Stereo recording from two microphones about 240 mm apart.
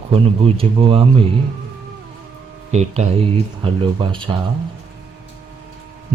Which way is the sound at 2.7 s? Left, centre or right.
Right.